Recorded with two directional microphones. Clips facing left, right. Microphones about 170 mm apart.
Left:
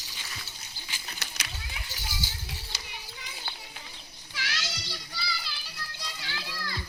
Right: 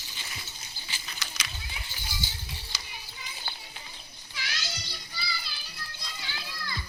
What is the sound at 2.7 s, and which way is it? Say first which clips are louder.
Children playing: even; 65° left (ahead or behind).